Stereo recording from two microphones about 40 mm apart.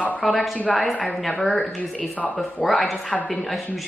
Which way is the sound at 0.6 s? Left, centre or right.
Left.